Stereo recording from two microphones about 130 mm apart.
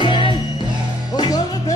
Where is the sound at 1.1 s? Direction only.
30° left (ahead or behind).